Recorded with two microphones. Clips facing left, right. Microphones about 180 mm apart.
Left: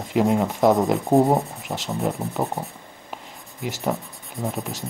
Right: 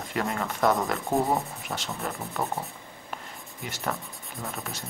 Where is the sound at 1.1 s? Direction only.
20° left (ahead or behind).